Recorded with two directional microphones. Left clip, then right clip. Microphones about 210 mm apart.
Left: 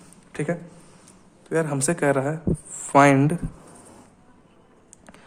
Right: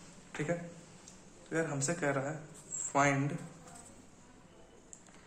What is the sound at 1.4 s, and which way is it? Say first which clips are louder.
Speech: left 11 dB; 55° left (ahead or behind).